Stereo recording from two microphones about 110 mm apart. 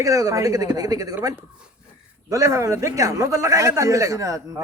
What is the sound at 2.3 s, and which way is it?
A man's voice, 30° right (ahead or behind).